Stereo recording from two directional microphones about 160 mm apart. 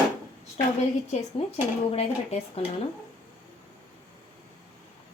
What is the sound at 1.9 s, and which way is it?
Speech, 40° left (ahead or behind).